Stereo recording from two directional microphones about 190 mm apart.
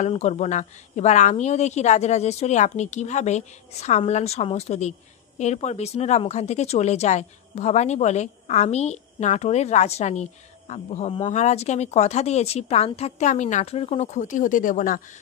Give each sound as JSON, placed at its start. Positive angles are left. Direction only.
{"t": 0.0, "sound": "a woman's voice", "side_deg": 35}